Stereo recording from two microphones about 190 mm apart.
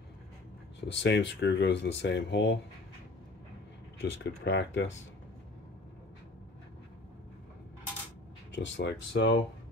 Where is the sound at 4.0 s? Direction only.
65° left (ahead or behind).